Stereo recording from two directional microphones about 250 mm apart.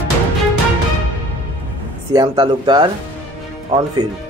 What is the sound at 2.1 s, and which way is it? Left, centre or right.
Speech, centre.